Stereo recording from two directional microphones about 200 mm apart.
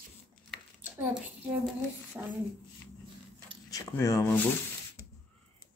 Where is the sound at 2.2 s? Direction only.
5° right (ahead or behind).